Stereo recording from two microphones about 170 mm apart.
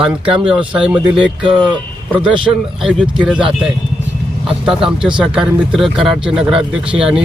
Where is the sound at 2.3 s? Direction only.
30° right (ahead or behind).